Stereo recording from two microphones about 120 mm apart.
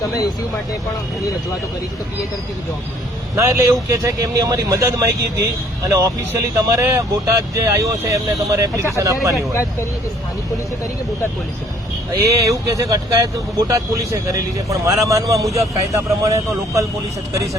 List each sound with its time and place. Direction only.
3.3 s speech: 25° right (ahead or behind)
12.1 s speech: 25° right (ahead or behind)